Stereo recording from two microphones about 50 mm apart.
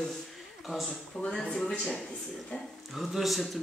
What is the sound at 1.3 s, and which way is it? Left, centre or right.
Speech, centre.